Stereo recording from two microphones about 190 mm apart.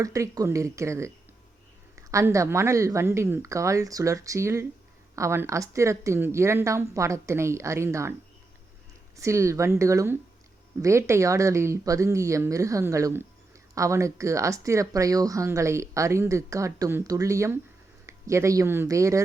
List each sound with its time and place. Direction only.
0.0 s speech: 15° right (ahead or behind)
9.1 s speech: 15° right (ahead or behind)